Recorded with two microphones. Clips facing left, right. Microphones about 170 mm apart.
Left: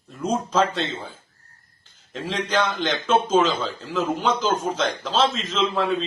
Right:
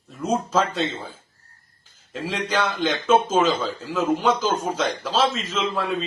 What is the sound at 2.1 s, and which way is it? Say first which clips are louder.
A man's voice: left 1 dB; 5° right (ahead or behind).